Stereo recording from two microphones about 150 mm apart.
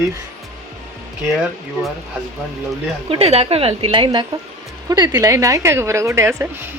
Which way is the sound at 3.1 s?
40° right (ahead or behind).